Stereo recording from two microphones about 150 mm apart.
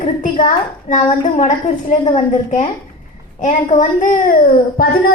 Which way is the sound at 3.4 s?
50° left (ahead or behind).